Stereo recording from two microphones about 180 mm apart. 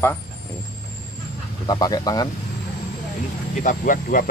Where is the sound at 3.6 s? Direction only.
50° left (ahead or behind).